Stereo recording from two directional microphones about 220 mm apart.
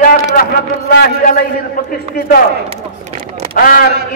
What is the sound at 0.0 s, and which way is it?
A man's voice, 40° left (ahead or behind).